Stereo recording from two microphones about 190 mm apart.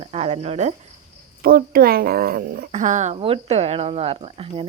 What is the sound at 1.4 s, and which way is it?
Speech, 50° right (ahead or behind).